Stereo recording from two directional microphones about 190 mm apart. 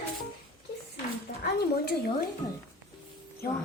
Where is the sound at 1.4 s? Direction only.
55° left (ahead or behind).